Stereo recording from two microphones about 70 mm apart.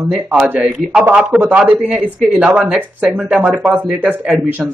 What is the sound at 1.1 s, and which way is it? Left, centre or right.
A man's voice, right.